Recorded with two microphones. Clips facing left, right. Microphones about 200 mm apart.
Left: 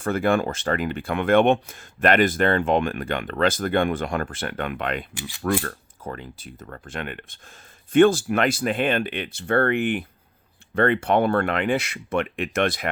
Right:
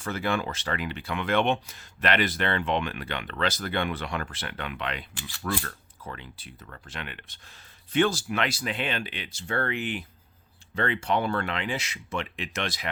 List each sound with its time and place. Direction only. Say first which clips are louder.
0.0 s speech: left 7 dB; 50° left (ahead or behind)